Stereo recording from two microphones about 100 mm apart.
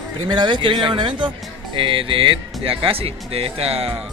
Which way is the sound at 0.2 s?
50° right (ahead or behind).